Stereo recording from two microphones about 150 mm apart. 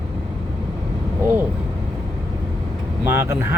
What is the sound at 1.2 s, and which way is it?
Speech, 15° right (ahead or behind).